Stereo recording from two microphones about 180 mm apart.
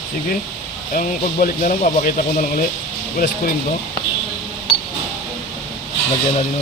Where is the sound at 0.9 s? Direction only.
50° left (ahead or behind).